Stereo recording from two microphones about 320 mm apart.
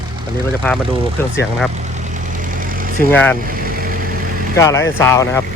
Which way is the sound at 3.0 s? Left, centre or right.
Centre.